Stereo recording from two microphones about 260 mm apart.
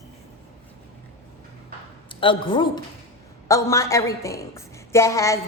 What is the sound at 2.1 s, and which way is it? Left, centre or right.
A woman's voice, centre.